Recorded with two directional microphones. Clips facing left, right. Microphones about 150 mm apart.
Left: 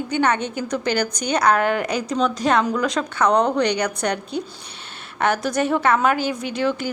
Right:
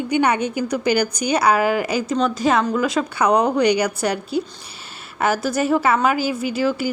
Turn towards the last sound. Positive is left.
turn(degrees=-5)  # may be behind; listen again after turning